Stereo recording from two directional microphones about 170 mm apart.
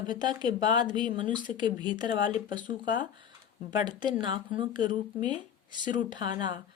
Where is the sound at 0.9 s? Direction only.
50° left (ahead or behind).